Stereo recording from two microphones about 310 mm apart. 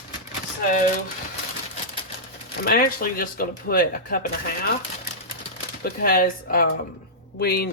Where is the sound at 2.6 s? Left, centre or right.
Left.